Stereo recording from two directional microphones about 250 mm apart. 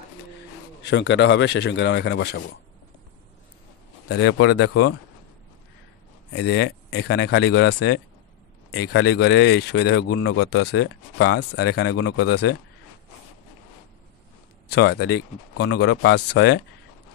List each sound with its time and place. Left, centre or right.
0.8 s speech: left
4.1 s speech: left
6.3 s speech: left
14.7 s speech: left